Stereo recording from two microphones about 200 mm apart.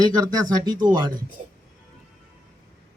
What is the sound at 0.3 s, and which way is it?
Speech, 20° right (ahead or behind).